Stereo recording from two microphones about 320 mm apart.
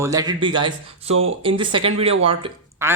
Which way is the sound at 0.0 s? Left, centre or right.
Centre.